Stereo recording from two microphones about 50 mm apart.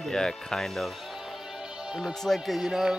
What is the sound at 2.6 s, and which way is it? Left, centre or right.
Speech, centre.